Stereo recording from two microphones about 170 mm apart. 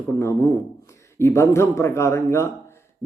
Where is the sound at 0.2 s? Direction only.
15° left (ahead or behind).